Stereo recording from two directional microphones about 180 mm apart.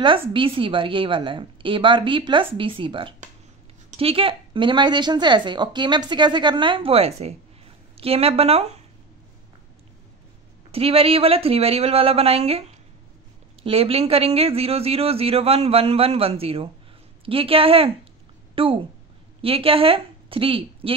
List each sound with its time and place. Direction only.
0.0 s a man's voice: 30° right (ahead or behind)
10.7 s a man's voice: 35° right (ahead or behind)
18.5 s a sound: 30° right (ahead or behind)
19.4 s speech: 30° right (ahead or behind)